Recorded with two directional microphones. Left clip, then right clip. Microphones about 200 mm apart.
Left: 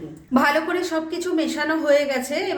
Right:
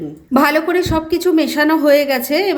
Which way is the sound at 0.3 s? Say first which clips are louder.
Right 6 dB; 35° right (ahead or behind).